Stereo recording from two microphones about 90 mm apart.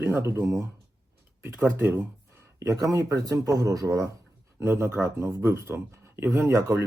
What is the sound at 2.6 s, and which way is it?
Speech, 35° right (ahead or behind).